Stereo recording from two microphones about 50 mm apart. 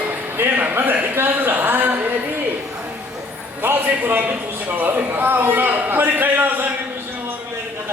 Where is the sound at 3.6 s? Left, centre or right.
Right.